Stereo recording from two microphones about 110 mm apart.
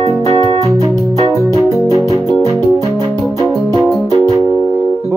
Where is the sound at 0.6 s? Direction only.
30° right (ahead or behind).